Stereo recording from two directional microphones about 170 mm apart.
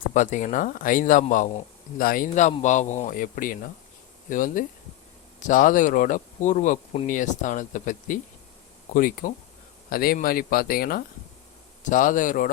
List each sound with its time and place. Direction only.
0.1 s speech: 45° left (ahead or behind)
11.8 s speech: 50° left (ahead or behind)